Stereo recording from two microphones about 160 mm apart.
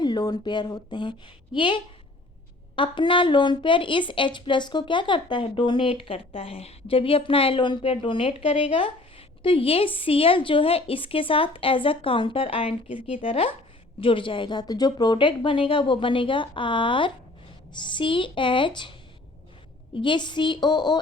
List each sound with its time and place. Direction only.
0.0 s a woman's voice: 25° left (ahead or behind)